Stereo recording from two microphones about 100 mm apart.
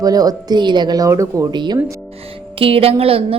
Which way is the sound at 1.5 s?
50° right (ahead or behind).